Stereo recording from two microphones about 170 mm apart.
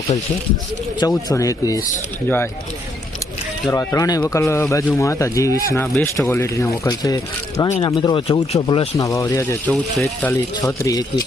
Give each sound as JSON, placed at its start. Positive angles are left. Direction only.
{"t": 0.9, "sound": "speech", "side_deg": 20}
{"t": 3.7, "sound": "speech", "side_deg": 20}
{"t": 5.8, "sound": "speech", "side_deg": 5}
{"t": 6.1, "sound": "speech", "side_deg": 15}
{"t": 9.0, "sound": "speech", "side_deg": 20}